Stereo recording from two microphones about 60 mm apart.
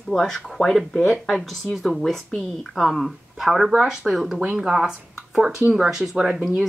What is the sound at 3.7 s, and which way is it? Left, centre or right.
Speech, centre.